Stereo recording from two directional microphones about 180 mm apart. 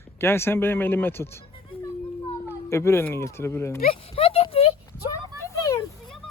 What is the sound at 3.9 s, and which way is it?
Clip-clop, 35° left (ahead or behind).